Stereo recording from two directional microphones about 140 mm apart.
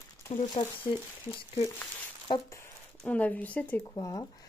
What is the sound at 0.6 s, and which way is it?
Speech, 40° left (ahead or behind).